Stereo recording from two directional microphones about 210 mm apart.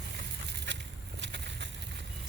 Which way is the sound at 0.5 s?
55° right (ahead or behind).